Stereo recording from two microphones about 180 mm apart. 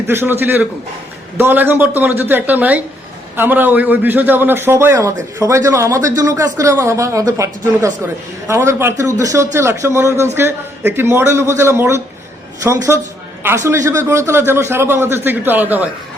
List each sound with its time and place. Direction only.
0.1 s a man's voice: 10° right (ahead or behind)